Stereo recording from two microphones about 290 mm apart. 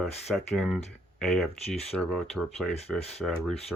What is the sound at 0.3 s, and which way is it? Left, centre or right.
Speech, centre.